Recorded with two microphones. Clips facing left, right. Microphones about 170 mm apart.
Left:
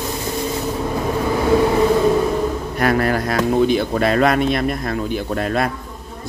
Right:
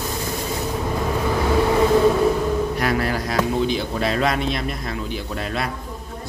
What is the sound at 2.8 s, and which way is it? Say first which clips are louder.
Speech: left 4 dB; 55° left (ahead or behind).